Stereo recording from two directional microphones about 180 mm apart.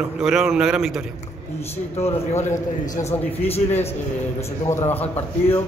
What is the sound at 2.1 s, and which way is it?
Speech, 40° left (ahead or behind).